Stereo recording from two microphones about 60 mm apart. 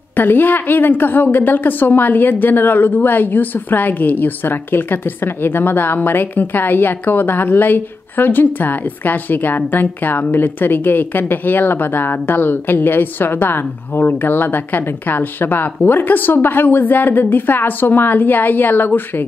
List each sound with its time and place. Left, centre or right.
0.1 s a woman's voice: left